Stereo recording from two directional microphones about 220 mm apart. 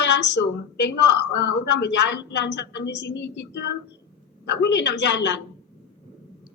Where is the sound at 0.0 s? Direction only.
50° left (ahead or behind).